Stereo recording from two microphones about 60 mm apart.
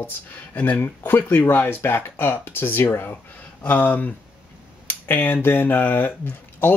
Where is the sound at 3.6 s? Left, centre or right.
Left.